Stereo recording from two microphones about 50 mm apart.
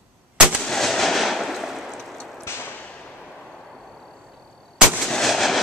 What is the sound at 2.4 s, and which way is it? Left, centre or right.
Whip, left.